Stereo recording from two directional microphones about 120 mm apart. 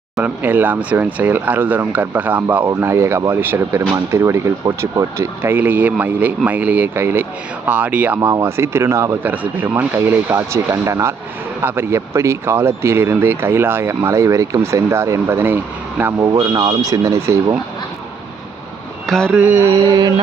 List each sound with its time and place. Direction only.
0.2 s speech: 15° right (ahead or behind); by 17.2 s 30° right (ahead or behind)
19.0 s mantra: centre (ahead or behind)
19.4 s speech: 20° right (ahead or behind)